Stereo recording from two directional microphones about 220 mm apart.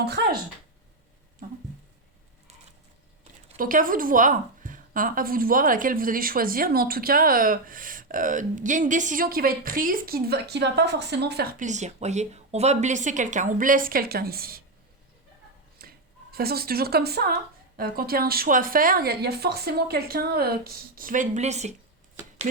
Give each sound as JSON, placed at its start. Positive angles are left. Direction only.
{"t": 3.6, "sound": "a woman's voice", "side_deg": -40}
{"t": 11.6, "sound": "a woman's voice", "side_deg": -30}
{"t": 15.8, "sound": "speech", "side_deg": -45}